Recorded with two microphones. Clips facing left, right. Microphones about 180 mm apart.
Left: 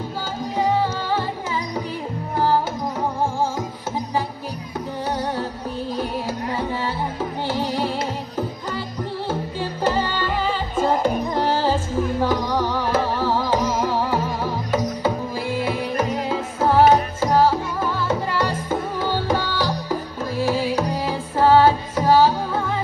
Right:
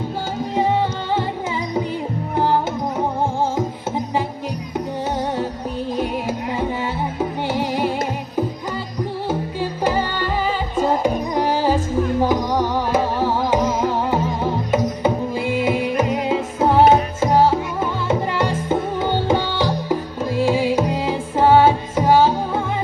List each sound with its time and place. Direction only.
7.4 s music: 15° right (ahead or behind)
9.3 s music: 10° right (ahead or behind)